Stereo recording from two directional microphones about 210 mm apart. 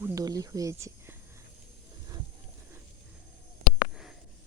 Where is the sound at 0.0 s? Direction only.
15° right (ahead or behind).